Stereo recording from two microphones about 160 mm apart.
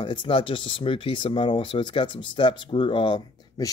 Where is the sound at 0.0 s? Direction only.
30° left (ahead or behind).